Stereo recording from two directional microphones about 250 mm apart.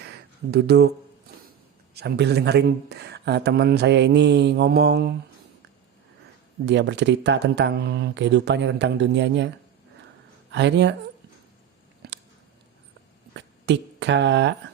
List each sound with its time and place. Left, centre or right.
0.5 s speech: right
2.0 s speech: right
6.7 s speech: right
10.5 s speech: right
13.3 s a sound: right